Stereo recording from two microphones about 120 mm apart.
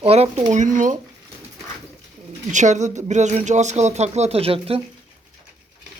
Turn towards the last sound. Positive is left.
turn(degrees=-55)  # may be behind; listen again after turning